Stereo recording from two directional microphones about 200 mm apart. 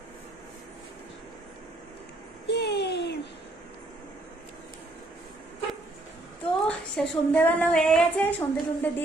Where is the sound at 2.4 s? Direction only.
55° left (ahead or behind).